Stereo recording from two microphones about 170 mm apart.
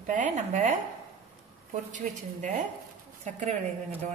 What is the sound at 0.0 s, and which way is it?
Speech, 50° right (ahead or behind).